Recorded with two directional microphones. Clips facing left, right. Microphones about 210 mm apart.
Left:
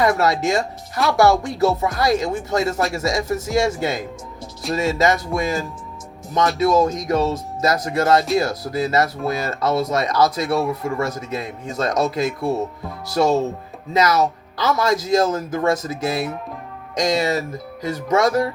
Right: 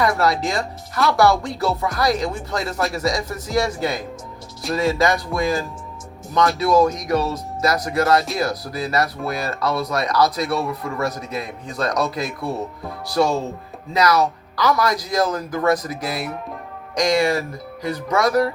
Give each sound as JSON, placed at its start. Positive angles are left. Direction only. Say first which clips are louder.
{"t": 0.0, "sound": "speech", "louder": "left 1 dB", "side_deg": 25}
{"t": 6.6, "sound": "speech", "louder": "left 1 dB", "side_deg": 20}